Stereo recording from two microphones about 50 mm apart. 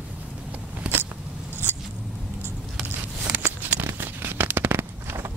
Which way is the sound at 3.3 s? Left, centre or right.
Right.